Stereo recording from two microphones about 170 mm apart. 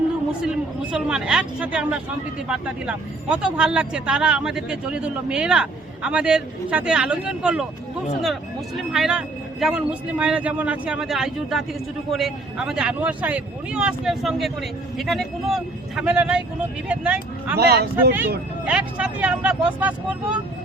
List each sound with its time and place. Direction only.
0.4 s speech: 5° right (ahead or behind)
17.6 s speech: 70° right (ahead or behind)
17.9 s speech: 10° right (ahead or behind)